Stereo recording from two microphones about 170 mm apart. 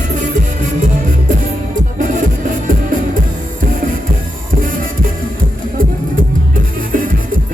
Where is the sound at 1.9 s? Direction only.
50° right (ahead or behind).